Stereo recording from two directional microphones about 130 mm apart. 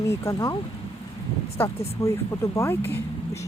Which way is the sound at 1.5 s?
20° left (ahead or behind).